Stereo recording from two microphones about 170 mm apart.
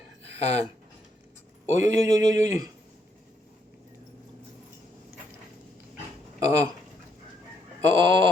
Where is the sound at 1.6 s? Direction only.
45° left (ahead or behind).